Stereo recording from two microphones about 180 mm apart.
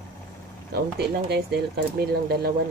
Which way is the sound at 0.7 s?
65° right (ahead or behind).